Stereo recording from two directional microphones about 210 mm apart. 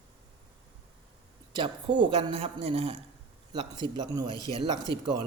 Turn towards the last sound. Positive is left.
turn(degrees=-20)  # may be behind; listen again after turning